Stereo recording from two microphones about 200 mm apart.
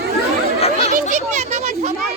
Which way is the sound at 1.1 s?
35° right (ahead or behind).